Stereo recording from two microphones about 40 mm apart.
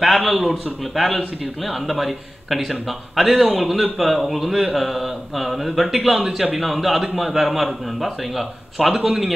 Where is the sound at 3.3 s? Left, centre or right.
Right.